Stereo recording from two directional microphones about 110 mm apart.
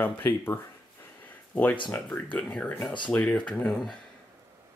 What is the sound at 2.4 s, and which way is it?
Speech, 10° left (ahead or behind).